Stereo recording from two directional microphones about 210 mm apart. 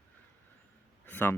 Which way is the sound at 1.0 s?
10° left (ahead or behind).